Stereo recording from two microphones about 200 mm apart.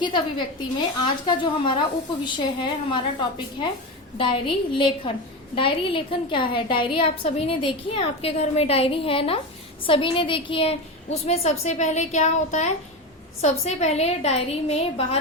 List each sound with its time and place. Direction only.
0.0 s a woman's voice: 20° left (ahead or behind)